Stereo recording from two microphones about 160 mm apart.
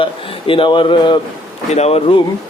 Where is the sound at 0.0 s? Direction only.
35° left (ahead or behind).